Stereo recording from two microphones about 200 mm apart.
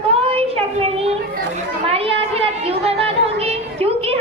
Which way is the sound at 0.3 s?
30° right (ahead or behind).